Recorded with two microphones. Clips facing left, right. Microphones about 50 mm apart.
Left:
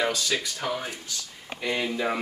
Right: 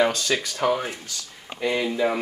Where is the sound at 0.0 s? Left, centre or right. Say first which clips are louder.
Right 5 dB; right.